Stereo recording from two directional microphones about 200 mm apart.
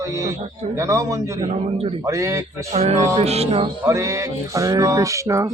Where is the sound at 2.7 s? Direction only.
35° right (ahead or behind).